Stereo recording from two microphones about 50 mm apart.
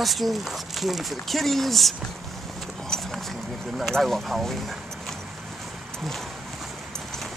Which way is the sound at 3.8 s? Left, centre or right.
Centre.